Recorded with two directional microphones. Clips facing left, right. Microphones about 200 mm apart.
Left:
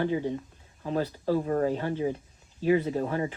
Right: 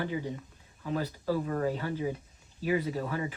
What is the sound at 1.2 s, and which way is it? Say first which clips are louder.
Speech: left 4 dB; 40° left (ahead or behind).